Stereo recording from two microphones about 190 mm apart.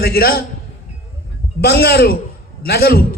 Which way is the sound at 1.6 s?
55° left (ahead or behind).